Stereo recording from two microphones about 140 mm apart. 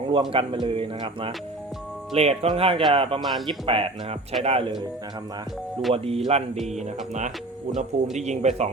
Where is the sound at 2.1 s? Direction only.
50° right (ahead or behind).